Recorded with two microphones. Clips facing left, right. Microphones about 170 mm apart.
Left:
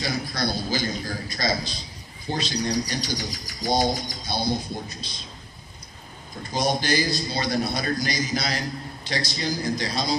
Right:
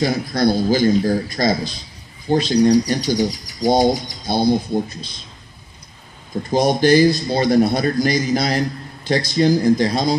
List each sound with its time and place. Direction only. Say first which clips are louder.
0.0 s a man's voice: right 10 dB; 50° right (ahead or behind)
4.3 s a man's voice: right 10 dB; 50° right (ahead or behind)
6.5 s a man's voice: right 10 dB; 55° right (ahead or behind)